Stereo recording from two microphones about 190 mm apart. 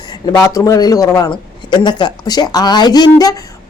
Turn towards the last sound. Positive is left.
turn(degrees=20)  # may be behind; listen again after turning